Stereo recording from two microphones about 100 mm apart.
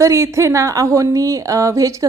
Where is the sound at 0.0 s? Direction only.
30° right (ahead or behind).